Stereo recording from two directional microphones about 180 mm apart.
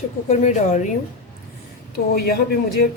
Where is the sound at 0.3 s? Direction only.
40° left (ahead or behind).